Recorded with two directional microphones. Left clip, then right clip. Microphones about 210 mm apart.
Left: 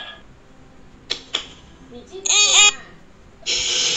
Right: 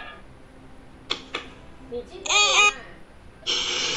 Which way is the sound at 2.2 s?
15° right (ahead or behind).